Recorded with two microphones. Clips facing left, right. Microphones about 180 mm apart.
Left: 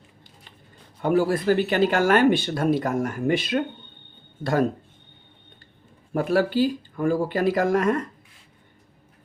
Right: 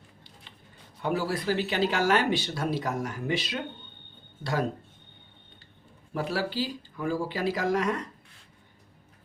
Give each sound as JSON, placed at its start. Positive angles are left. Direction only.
{"t": 1.0, "sound": "speech", "side_deg": 50}
{"t": 6.1, "sound": "speech", "side_deg": 50}